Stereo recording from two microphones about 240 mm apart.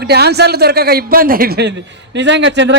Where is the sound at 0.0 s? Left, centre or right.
Right.